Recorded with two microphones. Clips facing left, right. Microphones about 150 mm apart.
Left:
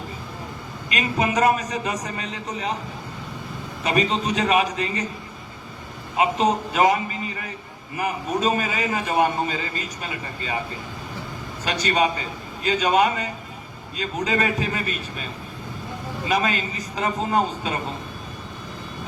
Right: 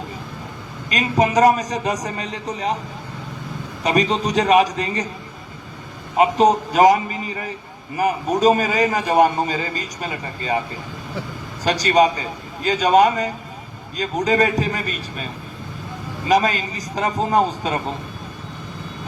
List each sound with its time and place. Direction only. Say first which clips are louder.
0.9 s a man's voice: right 5 dB; 35° right (ahead or behind)
3.8 s a man's voice: right 3 dB; 35° right (ahead or behind)
6.1 s a man's voice: right 5 dB; 40° right (ahead or behind)
11.6 s a man's voice: right 6 dB; 35° right (ahead or behind)
16.3 s a man's voice: right 6 dB; 40° right (ahead or behind)